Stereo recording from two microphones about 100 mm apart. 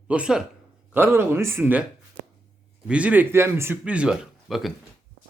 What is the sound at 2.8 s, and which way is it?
Speech, 10° right (ahead or behind).